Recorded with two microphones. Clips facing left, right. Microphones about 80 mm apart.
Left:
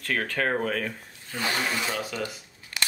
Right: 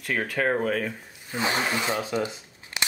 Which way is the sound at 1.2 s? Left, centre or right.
Centre.